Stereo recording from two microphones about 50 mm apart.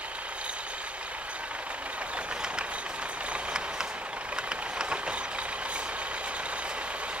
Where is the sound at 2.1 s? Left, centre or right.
Centre.